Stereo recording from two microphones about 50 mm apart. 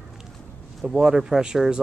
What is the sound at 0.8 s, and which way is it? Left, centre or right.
Speech, centre.